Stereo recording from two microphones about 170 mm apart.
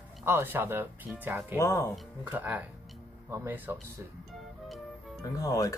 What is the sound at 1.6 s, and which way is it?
Speech, 15° left (ahead or behind).